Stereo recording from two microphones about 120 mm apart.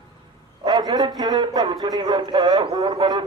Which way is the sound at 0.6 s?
35° right (ahead or behind).